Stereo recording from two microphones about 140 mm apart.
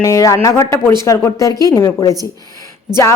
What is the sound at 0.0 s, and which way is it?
Speech, 25° left (ahead or behind).